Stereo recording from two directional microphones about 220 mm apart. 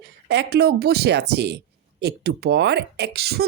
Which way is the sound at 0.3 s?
50° right (ahead or behind).